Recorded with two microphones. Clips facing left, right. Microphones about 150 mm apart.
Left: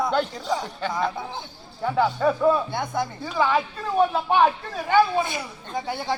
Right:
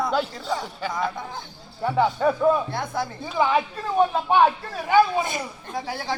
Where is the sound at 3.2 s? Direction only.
15° right (ahead or behind).